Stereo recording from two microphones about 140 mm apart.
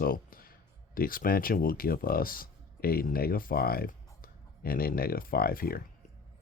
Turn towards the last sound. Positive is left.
turn(degrees=90)